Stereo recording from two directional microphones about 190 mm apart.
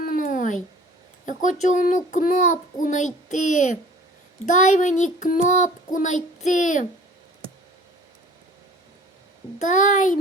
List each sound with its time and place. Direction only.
0.0 s a sound: 45° left (ahead or behind)
1.2 s speech: 40° left (ahead or behind)
1.6 s child singing: 40° left (ahead or behind)
9.6 s child singing: 40° left (ahead or behind)